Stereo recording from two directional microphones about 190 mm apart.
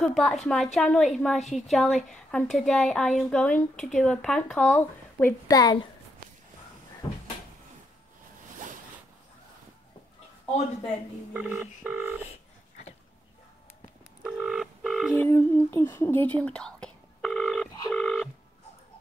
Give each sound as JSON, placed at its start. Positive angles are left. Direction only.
{"t": 0.0, "sound": "speech", "side_deg": 5}
{"t": 11.3, "sound": "speech", "side_deg": -5}
{"t": 12.3, "sound": "telephone dialing", "side_deg": 35}
{"t": 14.2, "sound": "telephone dialing", "side_deg": -5}
{"t": 15.2, "sound": "speech", "side_deg": 15}
{"t": 15.9, "sound": "telephone", "side_deg": 10}